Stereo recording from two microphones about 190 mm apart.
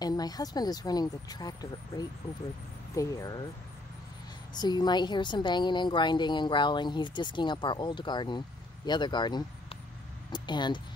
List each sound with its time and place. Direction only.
0.0 s a woman's voice: 20° left (ahead or behind)
4.6 s a woman's voice: 20° left (ahead or behind)